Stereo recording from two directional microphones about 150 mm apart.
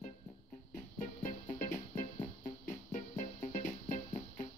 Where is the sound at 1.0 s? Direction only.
55° left (ahead or behind).